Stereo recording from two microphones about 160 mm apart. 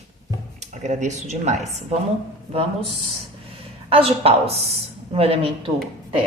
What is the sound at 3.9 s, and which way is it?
A woman's voice, 35° right (ahead or behind).